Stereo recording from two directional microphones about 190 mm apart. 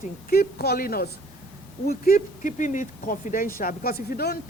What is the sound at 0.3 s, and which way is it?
Speech, 55° left (ahead or behind).